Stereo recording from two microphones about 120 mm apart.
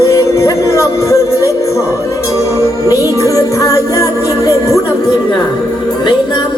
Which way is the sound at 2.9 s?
30° left (ahead or behind).